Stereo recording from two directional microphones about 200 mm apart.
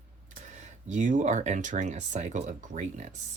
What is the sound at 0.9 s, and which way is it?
Speech, 40° right (ahead or behind).